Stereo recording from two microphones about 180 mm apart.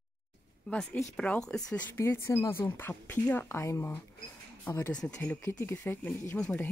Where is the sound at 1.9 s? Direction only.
15° left (ahead or behind).